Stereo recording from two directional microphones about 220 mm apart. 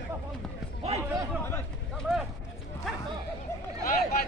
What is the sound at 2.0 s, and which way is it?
Clip-clop, centre (ahead or behind).